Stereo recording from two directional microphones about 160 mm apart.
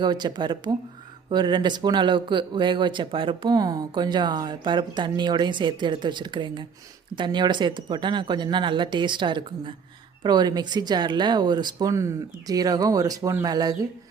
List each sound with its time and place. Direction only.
0.0 s speech: 25° right (ahead or behind)